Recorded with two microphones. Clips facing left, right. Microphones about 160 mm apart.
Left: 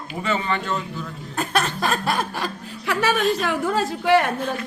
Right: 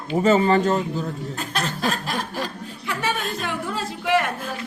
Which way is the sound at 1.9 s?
75° left (ahead or behind).